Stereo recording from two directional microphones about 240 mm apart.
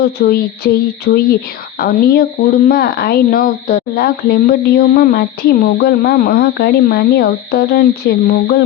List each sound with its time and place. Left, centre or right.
0.0 s a woman's voice: left